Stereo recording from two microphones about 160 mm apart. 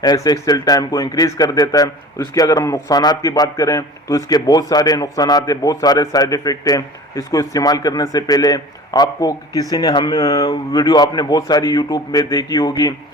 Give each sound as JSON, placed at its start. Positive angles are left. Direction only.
{"t": 0.0, "sound": "speech", "side_deg": 25}